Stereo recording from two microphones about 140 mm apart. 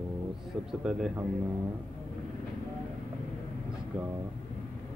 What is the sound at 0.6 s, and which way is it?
Speech, 5° right (ahead or behind).